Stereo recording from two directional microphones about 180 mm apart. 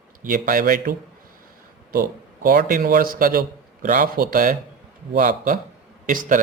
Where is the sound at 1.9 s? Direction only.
50° right (ahead or behind).